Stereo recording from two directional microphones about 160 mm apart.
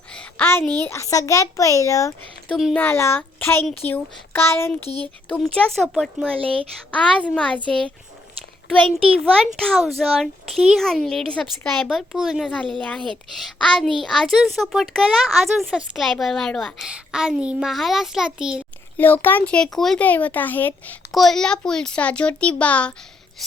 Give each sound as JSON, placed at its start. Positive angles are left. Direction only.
{"t": 0.1, "sound": "a sound", "side_deg": 10}
{"t": 0.8, "sound": "a child's voice", "side_deg": 15}
{"t": 2.5, "sound": "a woman's voice", "side_deg": 0}
{"t": 2.7, "sound": "a child's voice", "side_deg": 15}
{"t": 9.6, "sound": "a woman's voice", "side_deg": 5}
{"t": 18.9, "sound": "a child's voice", "side_deg": 10}
{"t": 21.1, "sound": "a child's voice", "side_deg": 0}